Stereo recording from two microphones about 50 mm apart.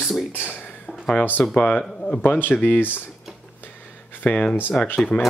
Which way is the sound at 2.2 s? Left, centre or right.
Left.